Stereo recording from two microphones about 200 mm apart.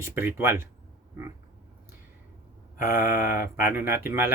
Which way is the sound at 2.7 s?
45° left (ahead or behind).